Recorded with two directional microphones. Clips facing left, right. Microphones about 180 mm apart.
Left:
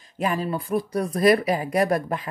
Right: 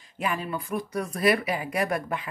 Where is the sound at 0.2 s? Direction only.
35° left (ahead or behind).